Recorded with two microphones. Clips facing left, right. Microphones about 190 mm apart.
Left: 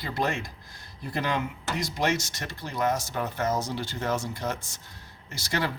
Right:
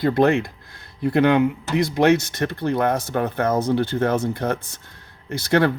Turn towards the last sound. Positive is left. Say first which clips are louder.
# right 11 dB
turn(degrees=-55)  # may be behind; listen again after turning